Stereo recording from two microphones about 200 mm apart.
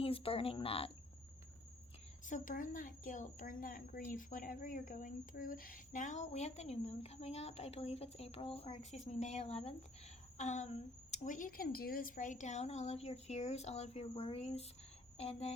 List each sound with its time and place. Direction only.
0.0 s speech: 30° left (ahead or behind)
2.2 s a child's voice: 40° left (ahead or behind)